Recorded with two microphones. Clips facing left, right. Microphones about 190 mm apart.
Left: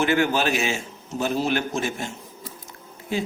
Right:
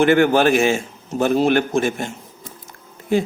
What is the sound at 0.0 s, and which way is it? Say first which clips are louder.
A man's voice: right 7 dB; 55° right (ahead or behind).